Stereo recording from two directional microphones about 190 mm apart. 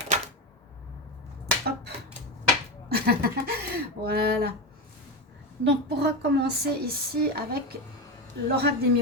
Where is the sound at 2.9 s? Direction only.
55° right (ahead or behind).